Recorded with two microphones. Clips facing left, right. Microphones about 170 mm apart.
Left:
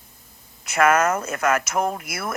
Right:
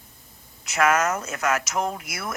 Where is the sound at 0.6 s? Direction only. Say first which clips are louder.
Left 3 dB; 55° left (ahead or behind).